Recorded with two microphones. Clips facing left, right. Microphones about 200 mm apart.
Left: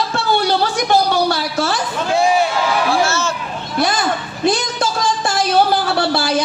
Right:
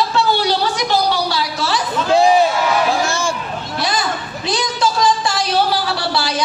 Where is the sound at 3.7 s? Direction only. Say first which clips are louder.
Left 4 dB; 50° left (ahead or behind).